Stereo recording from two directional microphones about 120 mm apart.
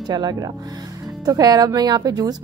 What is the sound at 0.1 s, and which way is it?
A woman's voice, 35° right (ahead or behind).